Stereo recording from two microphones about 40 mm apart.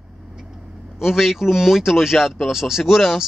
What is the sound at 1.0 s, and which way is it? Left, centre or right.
Speech, centre.